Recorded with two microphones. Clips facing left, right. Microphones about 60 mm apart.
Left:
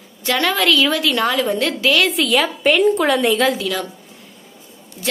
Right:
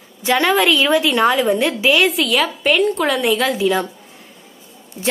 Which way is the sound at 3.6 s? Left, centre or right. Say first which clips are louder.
Right 6 dB; right.